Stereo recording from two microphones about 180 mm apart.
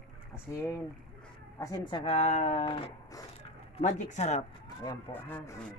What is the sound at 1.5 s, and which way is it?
Speech, 20° left (ahead or behind).